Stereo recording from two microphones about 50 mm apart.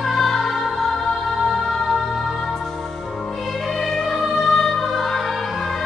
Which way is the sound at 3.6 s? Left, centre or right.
Centre.